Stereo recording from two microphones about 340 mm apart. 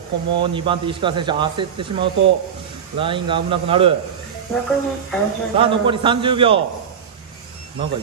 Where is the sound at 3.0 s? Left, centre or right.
Centre.